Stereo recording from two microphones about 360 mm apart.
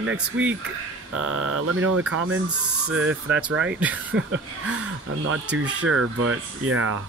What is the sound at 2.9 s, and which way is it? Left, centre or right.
Speech, centre.